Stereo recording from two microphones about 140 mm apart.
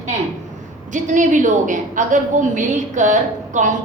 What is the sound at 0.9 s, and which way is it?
A woman's voice, 65° right (ahead or behind).